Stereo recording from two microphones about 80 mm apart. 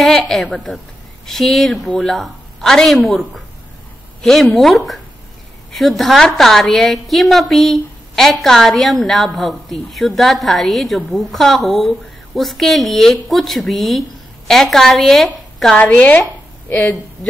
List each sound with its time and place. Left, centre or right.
0.0 s a woman's voice: centre
15.7 s speech: centre